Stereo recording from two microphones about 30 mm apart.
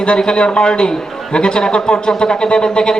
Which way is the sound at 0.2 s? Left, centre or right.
Left.